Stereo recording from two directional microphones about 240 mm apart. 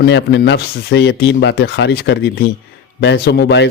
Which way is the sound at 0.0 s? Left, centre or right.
Left.